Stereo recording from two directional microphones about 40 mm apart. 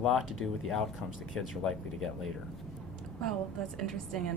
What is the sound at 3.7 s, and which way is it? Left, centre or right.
Speech, centre.